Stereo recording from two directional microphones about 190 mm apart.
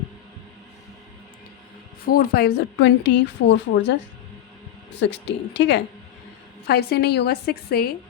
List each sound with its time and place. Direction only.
2.0 s a woman's voice: 55° left (ahead or behind); by 3.9 s 70° left (ahead or behind)
4.9 s a woman's voice: 65° left (ahead or behind)
6.7 s a woman's voice: 55° left (ahead or behind)